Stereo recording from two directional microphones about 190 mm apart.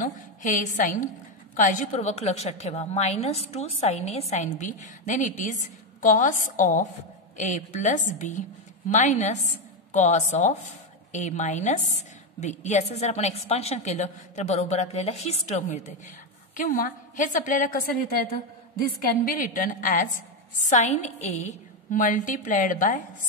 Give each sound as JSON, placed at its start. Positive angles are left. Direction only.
{"t": 0.0, "sound": "a woman's voice", "side_deg": 40}
{"t": 18.9, "sound": "a woman's voice", "side_deg": 45}